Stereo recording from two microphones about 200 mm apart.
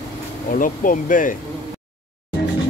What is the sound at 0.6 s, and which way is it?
Speech, 40° left (ahead or behind).